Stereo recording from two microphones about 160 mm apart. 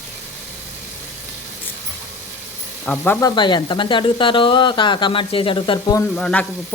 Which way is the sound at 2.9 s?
10° left (ahead or behind).